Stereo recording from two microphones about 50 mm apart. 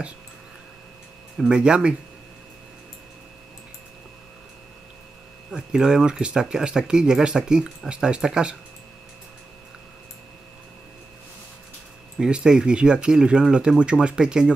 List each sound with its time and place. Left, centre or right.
1.5 s speech: centre
5.5 s speech: centre
12.2 s speech: centre